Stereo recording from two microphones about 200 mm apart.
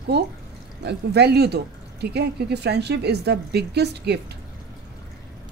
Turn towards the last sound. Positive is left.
turn(degrees=-55)  # may be behind; listen again after turning